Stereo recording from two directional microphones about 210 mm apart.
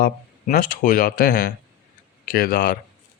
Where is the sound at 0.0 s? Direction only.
40° left (ahead or behind).